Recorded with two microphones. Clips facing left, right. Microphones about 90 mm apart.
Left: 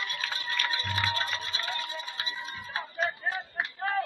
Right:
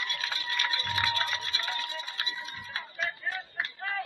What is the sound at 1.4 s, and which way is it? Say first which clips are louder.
Music: even; 40° left (ahead or behind).